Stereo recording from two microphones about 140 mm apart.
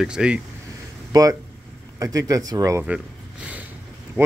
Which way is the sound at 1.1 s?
30° right (ahead or behind).